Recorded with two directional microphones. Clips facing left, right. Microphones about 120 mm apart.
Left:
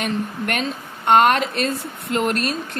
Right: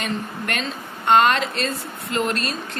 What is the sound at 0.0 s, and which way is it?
A woman's voice, 55° left (ahead or behind).